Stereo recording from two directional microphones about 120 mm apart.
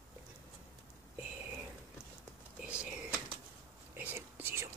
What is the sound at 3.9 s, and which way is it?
Whispering, 20° right (ahead or behind).